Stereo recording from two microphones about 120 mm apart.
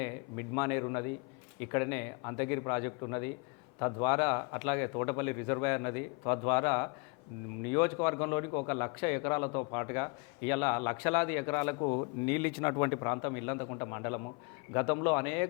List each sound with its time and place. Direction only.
0.0 s a man's voice: 20° left (ahead or behind)
12.2 s a man's voice: 20° left (ahead or behind)